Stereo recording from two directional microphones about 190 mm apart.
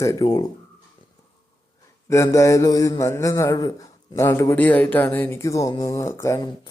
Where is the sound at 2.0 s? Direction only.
15° left (ahead or behind).